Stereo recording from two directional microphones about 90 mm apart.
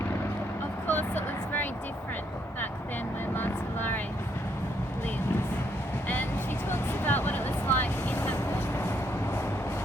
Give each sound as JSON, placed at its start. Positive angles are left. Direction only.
{"t": 0.9, "sound": "vehicle", "side_deg": 20}
{"t": 3.3, "sound": "vehicle", "side_deg": 20}
{"t": 6.7, "sound": "vehicle", "side_deg": 20}